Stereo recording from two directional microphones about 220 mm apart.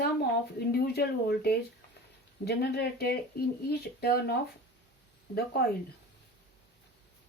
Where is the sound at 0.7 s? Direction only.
45° left (ahead or behind).